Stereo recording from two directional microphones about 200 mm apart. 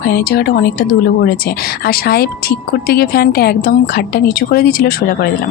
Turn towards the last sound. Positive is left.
turn(degrees=50)  # may be behind; listen again after turning